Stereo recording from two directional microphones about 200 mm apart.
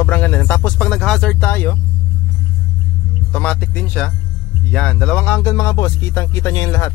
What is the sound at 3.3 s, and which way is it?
Speech, 5° left (ahead or behind).